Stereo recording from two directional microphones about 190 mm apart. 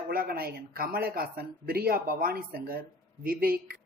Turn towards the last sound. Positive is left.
turn(degrees=-50)  # may be behind; listen again after turning